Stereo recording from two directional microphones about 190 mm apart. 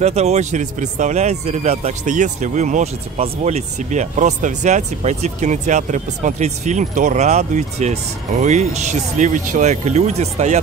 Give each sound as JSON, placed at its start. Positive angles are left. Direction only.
{"t": 0.0, "sound": "speech", "side_deg": -35}